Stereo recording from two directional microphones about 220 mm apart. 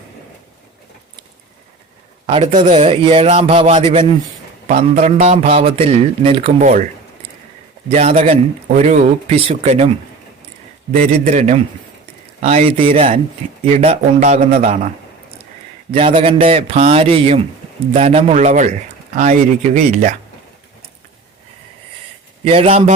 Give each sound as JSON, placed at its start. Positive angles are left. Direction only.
{"t": 2.2, "sound": "a man's voice", "side_deg": -25}
{"t": 7.9, "sound": "speech", "side_deg": -30}
{"t": 10.9, "sound": "a man's voice", "side_deg": -35}
{"t": 15.9, "sound": "a man's voice", "side_deg": -25}
{"t": 22.4, "sound": "speech", "side_deg": -25}